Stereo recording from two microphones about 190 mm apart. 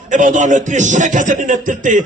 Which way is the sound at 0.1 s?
40° right (ahead or behind).